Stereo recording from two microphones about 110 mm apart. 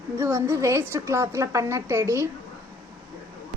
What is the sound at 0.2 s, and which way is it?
A woman's voice, 25° right (ahead or behind).